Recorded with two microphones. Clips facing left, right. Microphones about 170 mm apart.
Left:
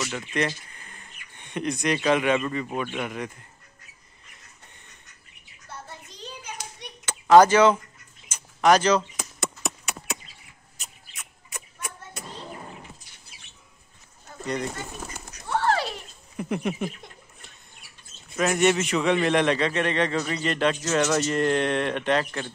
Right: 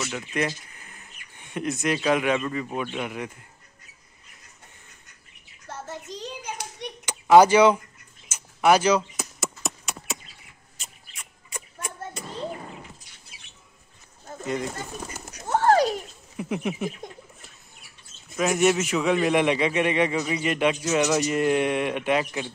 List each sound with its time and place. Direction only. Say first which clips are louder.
0.0 s speech: even; 5° right (ahead or behind)
5.7 s hands: right 6 dB; 90° right
7.1 s speech: even; 15° right (ahead or behind)
8.3 s a sound: even; 10° right (ahead or behind)
14.4 s speech: even; 5° right (ahead or behind)
15.4 s horse: right 5 dB; 45° right (ahead or behind)
16.3 s speech: left 1 dB; centre (ahead or behind)
18.3 s a man's voice: even; 5° right (ahead or behind)